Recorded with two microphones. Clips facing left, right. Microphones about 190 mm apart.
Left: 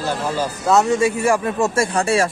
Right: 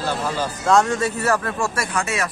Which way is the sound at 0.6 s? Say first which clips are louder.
Left 2 dB; 5° left (ahead or behind).